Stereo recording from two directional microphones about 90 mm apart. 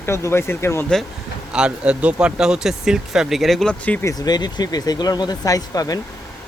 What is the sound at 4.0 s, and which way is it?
Speech, 40° left (ahead or behind).